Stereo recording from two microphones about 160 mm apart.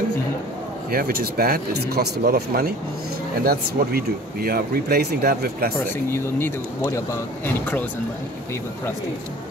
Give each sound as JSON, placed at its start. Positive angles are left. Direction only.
{"t": 0.9, "sound": "speech", "side_deg": -70}
{"t": 6.1, "sound": "speech", "side_deg": 15}